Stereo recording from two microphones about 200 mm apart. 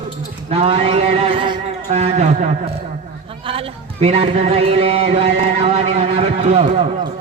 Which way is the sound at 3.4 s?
30° right (ahead or behind).